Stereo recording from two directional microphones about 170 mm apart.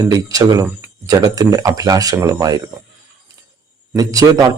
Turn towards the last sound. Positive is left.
turn(degrees=-20)  # may be behind; listen again after turning